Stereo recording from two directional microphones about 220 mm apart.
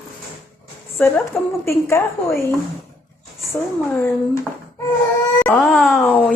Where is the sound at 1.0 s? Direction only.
5° left (ahead or behind).